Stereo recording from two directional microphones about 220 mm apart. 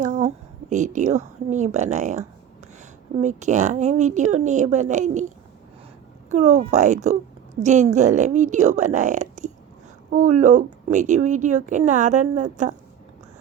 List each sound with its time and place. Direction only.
0.0 s a sound: 35° right (ahead or behind)
0.7 s a woman's voice: 35° right (ahead or behind)
6.3 s a woman's voice: 30° right (ahead or behind)